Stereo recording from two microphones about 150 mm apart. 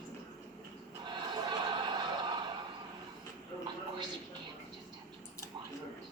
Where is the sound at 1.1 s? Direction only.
30° right (ahead or behind).